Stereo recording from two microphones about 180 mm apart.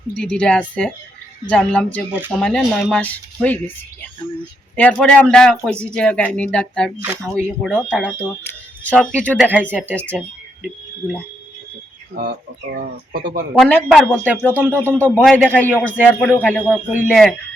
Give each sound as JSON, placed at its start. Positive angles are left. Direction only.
{"t": 0.2, "sound": "speech", "side_deg": 5}
{"t": 4.8, "sound": "speech", "side_deg": 5}
{"t": 12.7, "sound": "speech", "side_deg": -60}
{"t": 13.6, "sound": "speech", "side_deg": 10}
{"t": 14.5, "sound": "speech", "side_deg": -10}
{"t": 14.9, "sound": "speech", "side_deg": 10}